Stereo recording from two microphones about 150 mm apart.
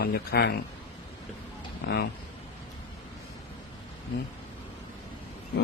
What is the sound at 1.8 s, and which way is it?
Speech, 90° left.